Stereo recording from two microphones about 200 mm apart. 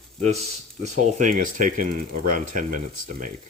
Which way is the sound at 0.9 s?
40° right (ahead or behind).